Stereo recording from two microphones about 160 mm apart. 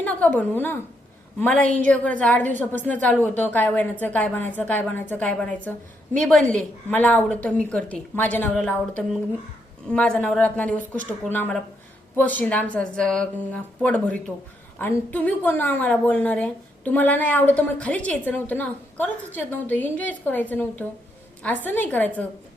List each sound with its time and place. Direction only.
0.0 s a woman's voice: 10° left (ahead or behind)
10.8 s speech: 55° right (ahead or behind)
11.3 s a woman's voice: 10° left (ahead or behind)